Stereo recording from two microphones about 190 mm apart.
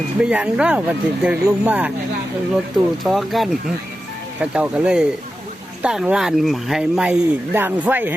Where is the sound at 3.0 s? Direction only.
Centre (ahead or behind).